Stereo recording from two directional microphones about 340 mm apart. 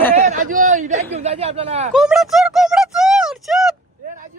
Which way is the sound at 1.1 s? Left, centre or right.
Centre.